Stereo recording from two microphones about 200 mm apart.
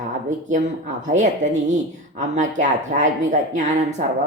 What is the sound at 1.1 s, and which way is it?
Speech, 40° right (ahead or behind).